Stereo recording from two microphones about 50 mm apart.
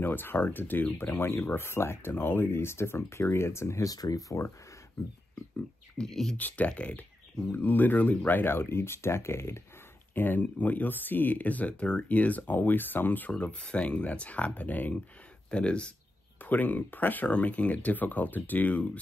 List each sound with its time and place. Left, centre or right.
0.0 s speech: left
1.1 s speech: left
4.0 s speech: left
6.0 s speech: centre
6.3 s speech: left
7.5 s speech: left
10.1 s speech: left
13.3 s speech: left
15.5 s speech: left
16.3 s speech: left